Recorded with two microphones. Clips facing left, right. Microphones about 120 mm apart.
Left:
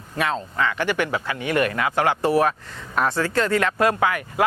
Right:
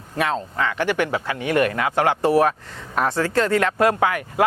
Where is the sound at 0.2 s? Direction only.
45° right (ahead or behind).